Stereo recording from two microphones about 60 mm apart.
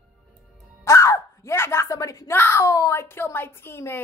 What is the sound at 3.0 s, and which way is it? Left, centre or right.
A woman's voice, left.